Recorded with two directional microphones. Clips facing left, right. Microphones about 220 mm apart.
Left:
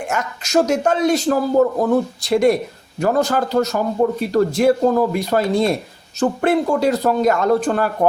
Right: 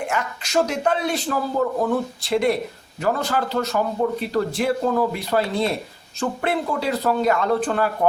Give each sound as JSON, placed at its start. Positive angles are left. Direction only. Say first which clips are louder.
{"t": 0.1, "sound": "a man's voice", "louder": "left 9 dB", "side_deg": 45}